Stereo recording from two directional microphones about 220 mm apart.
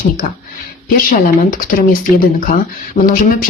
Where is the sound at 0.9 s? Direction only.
40° left (ahead or behind).